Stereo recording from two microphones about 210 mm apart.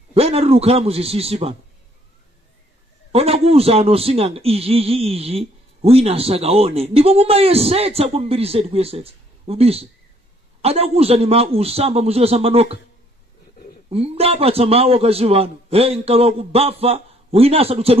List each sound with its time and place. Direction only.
0.1 s a man's voice: 30° right (ahead or behind)
3.1 s a man's voice: 30° right (ahead or behind)
13.8 s a man's voice: 30° right (ahead or behind)